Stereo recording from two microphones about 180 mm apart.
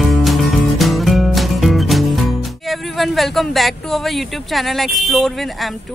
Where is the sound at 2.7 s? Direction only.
Centre (ahead or behind).